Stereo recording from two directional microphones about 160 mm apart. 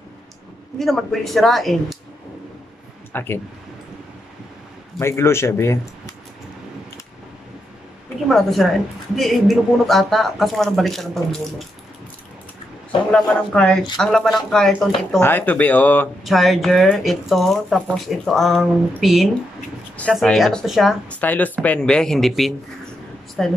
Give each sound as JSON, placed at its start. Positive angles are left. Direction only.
{"t": 0.7, "sound": "speech", "side_deg": 0}
{"t": 3.1, "sound": "speech", "side_deg": 15}
{"t": 4.9, "sound": "speech", "side_deg": 15}
{"t": 8.3, "sound": "speech", "side_deg": 0}
{"t": 13.1, "sound": "speech", "side_deg": 5}
{"t": 16.3, "sound": "speech", "side_deg": 0}
{"t": 21.2, "sound": "speech", "side_deg": 10}